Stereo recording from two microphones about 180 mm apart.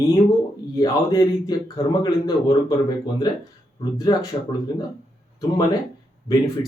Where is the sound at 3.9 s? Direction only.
20° left (ahead or behind).